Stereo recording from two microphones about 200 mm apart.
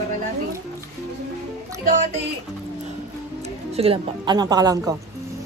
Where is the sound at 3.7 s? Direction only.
30° right (ahead or behind).